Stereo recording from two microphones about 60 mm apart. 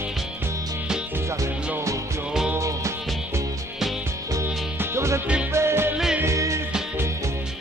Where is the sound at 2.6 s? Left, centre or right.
Right.